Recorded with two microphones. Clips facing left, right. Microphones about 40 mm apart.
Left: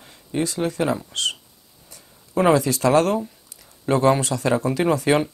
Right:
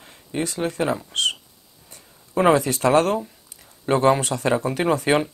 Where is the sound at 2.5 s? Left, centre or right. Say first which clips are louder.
Even; right.